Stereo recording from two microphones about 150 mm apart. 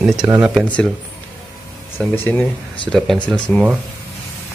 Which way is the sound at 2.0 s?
10° left (ahead or behind).